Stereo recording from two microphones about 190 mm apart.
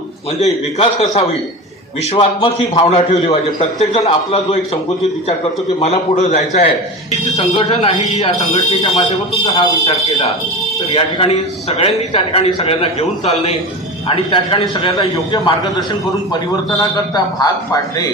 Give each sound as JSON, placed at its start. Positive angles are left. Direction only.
{"t": 0.3, "sound": "a man's voice", "side_deg": 35}
{"t": 2.1, "sound": "a man's voice", "side_deg": 25}
{"t": 5.8, "sound": "a man's voice", "side_deg": 35}